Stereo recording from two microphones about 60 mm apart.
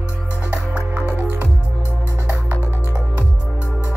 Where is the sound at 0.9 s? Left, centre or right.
Right.